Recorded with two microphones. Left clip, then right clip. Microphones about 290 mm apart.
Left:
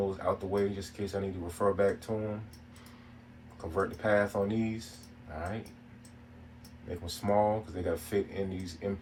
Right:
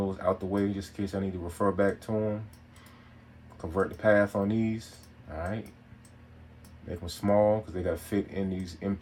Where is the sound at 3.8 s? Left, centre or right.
Right.